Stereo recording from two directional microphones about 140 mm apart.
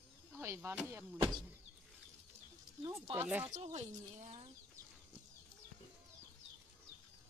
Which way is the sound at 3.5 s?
55° right (ahead or behind).